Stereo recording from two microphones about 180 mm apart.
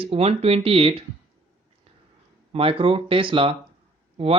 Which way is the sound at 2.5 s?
30° right (ahead or behind).